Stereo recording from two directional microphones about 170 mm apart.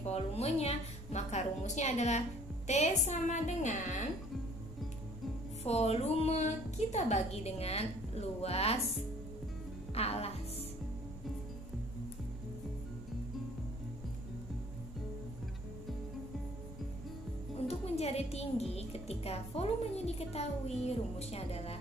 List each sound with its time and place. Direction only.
0.0 s a woman's voice: 40° left (ahead or behind)
5.6 s a woman's voice: 40° left (ahead or behind)
9.9 s a woman's voice: 35° left (ahead or behind)
17.6 s a woman's voice: 35° left (ahead or behind)